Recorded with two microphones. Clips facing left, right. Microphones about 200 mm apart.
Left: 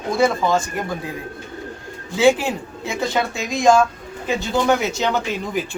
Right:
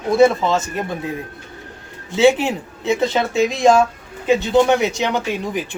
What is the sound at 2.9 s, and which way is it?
Speech, 25° right (ahead or behind).